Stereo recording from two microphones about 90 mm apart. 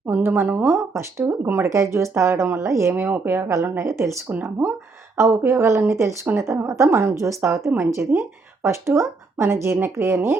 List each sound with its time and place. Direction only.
0.1 s speech: 25° right (ahead or behind)
5.1 s speech: 30° right (ahead or behind)